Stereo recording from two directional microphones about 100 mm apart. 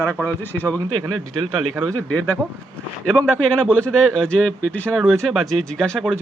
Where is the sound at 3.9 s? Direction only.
5° left (ahead or behind).